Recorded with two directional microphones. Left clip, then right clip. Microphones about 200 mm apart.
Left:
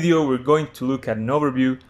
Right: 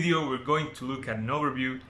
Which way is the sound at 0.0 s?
30° left (ahead or behind).